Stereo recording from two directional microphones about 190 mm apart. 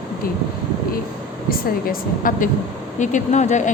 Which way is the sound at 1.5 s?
50° left (ahead or behind).